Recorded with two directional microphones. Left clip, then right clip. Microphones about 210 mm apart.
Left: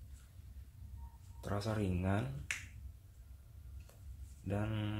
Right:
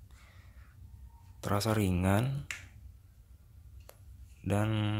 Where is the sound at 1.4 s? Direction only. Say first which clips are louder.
Right 8 dB; 35° right (ahead or behind).